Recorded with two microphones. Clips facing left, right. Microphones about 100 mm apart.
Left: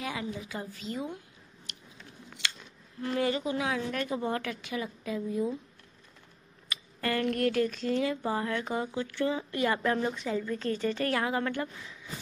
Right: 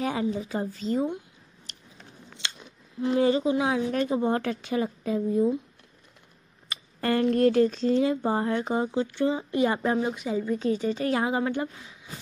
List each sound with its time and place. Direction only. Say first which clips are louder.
0.0 s speech: right 8 dB; 35° right (ahead or behind)
2.3 s speech: even; 20° right (ahead or behind)
6.7 s a woman's voice: right 5 dB; 30° right (ahead or behind)